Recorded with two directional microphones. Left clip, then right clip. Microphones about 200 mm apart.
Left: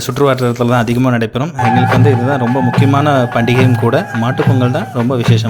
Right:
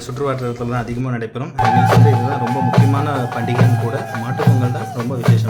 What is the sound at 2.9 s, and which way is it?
Speech, 35° left (ahead or behind).